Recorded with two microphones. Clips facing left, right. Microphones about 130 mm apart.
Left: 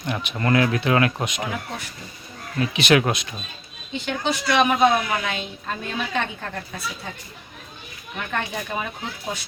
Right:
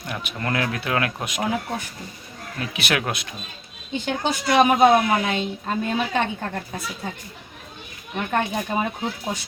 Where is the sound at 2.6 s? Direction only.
5° right (ahead or behind).